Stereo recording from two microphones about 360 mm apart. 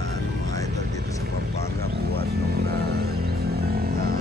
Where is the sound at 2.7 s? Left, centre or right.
Right.